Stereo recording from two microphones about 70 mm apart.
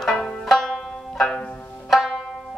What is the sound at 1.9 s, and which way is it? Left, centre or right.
Music, centre.